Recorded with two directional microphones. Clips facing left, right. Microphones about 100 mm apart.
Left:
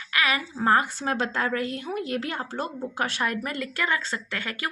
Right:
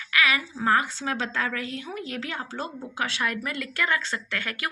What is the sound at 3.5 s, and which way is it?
Speech, 25° left (ahead or behind).